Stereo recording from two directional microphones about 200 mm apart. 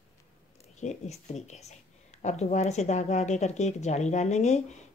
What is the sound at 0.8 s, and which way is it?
Speech, 35° left (ahead or behind).